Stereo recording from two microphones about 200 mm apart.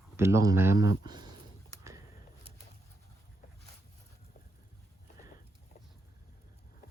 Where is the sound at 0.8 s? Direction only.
55° left (ahead or behind).